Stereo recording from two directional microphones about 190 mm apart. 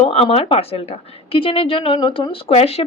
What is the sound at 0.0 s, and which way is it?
A woman's voice, 30° left (ahead or behind).